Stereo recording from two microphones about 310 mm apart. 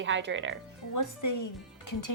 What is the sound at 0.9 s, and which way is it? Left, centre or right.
Speech, left.